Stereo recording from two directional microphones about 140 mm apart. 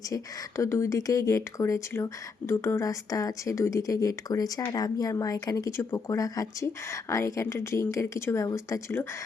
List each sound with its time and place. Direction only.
0.1 s speech: 20° left (ahead or behind)